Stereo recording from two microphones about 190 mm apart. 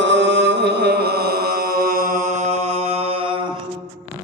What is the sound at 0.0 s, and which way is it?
Chant, 70° right (ahead or behind).